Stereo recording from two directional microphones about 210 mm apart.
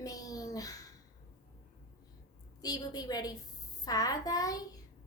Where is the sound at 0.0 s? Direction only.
15° left (ahead or behind).